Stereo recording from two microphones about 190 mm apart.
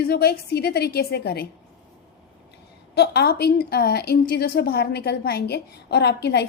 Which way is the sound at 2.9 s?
60° left (ahead or behind).